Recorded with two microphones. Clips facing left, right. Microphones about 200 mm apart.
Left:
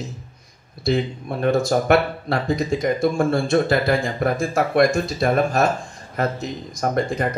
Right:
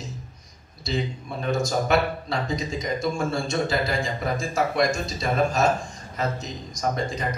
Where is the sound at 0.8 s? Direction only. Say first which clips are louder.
Left 7 dB; 60° left (ahead or behind).